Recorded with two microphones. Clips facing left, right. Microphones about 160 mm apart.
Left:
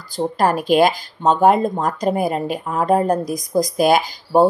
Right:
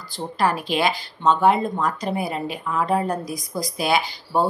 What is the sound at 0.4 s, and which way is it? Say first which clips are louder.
Speech: left 6 dB; 45° left (ahead or behind).